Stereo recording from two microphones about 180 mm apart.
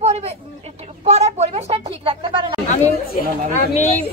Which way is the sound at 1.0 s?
35° right (ahead or behind).